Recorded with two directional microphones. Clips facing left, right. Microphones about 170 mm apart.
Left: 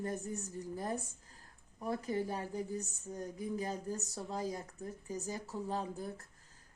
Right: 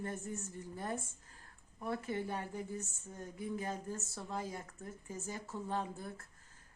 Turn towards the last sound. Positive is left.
turn(degrees=40)  # may be behind; listen again after turning